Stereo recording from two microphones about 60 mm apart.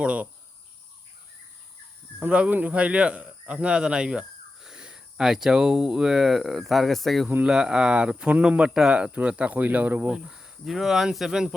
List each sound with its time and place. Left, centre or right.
0.0 s cricket: centre
2.1 s speech: centre
7.4 s speech: centre; by 10.1 s right
10.1 s speech: centre